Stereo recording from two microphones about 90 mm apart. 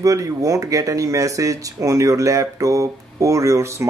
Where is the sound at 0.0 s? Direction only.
40° right (ahead or behind).